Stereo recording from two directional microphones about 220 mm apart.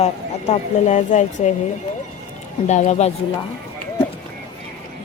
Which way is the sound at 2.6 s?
30° left (ahead or behind).